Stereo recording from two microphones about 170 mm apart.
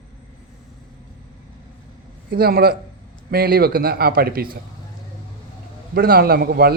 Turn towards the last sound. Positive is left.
turn(degrees=-65)  # may be behind; listen again after turning